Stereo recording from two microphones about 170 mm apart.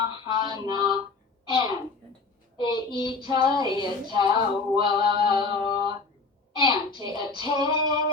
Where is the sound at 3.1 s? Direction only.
25° right (ahead or behind).